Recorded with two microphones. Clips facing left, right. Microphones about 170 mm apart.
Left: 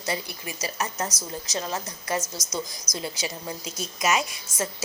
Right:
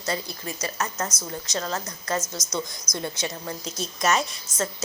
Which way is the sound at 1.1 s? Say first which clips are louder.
Right 1 dB; 35° left (ahead or behind).